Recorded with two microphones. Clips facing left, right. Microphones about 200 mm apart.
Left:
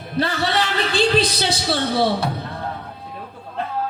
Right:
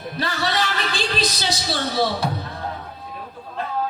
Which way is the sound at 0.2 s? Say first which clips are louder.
Left 4 dB; 60° left (ahead or behind).